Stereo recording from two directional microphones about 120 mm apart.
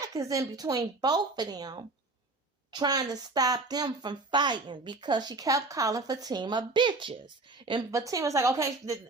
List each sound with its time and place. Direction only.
0.0 s speech: 25° right (ahead or behind); by 7.9 s 45° right (ahead or behind)
7.9 s a woman's voice: 25° right (ahead or behind)